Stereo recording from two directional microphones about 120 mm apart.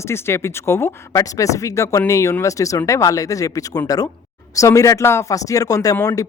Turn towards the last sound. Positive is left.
turn(degrees=30)  # may be behind; listen again after turning